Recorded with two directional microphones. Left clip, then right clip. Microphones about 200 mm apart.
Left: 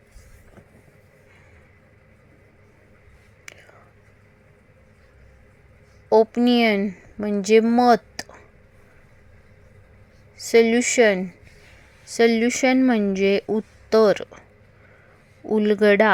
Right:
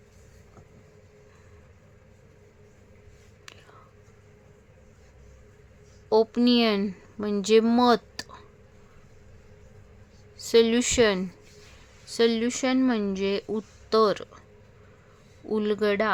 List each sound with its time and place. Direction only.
6.1 s speech: 10° left (ahead or behind)
7.9 s a sound: 10° left (ahead or behind)
10.3 s speech: 10° left (ahead or behind)
15.4 s speech: 15° left (ahead or behind)